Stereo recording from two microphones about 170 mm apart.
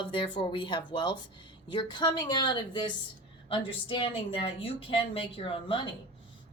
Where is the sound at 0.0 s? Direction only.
30° left (ahead or behind).